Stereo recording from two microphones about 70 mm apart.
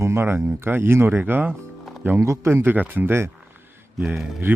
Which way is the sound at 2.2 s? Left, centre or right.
Right.